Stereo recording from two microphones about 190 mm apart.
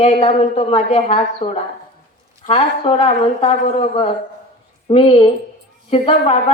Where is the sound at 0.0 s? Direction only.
30° left (ahead or behind).